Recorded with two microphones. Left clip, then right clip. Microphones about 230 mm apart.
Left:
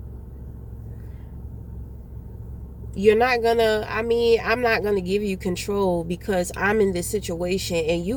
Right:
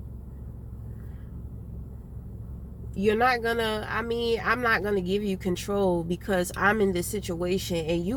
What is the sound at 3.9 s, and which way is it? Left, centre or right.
Speech, centre.